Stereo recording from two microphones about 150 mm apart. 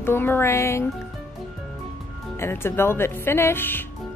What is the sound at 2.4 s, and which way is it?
A woman's voice, 15° left (ahead or behind).